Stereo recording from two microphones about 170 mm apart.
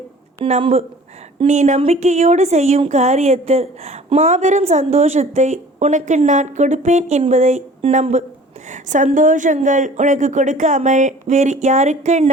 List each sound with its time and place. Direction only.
0.4 s speech: 35° right (ahead or behind)